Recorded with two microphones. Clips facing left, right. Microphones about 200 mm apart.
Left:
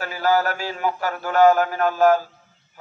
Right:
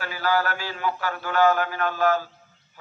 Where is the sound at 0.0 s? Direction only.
45° left (ahead or behind).